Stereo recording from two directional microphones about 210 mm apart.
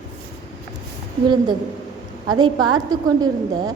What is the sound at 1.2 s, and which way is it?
A woman's voice, 20° right (ahead or behind).